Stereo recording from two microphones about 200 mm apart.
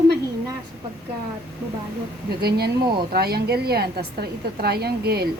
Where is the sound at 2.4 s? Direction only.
55° right (ahead or behind).